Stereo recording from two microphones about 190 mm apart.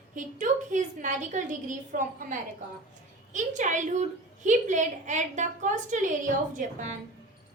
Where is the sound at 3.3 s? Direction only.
40° right (ahead or behind).